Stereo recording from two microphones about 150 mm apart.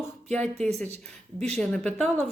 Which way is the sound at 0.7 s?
45° right (ahead or behind).